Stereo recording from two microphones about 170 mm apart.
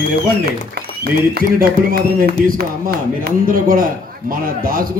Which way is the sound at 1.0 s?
70° right (ahead or behind).